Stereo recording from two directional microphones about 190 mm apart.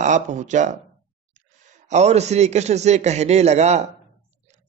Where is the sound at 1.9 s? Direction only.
35° right (ahead or behind).